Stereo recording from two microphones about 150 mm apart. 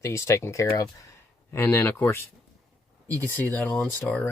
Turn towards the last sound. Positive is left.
turn(degrees=10)  # may be behind; listen again after turning